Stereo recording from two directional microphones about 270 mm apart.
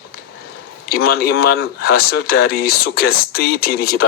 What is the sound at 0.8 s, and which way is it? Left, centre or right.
Speech, left.